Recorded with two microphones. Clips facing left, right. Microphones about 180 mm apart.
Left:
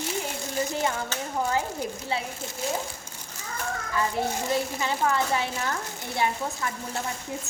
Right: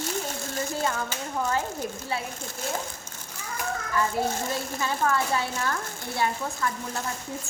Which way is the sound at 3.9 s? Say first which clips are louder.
Right 1 dB; 15° left (ahead or behind).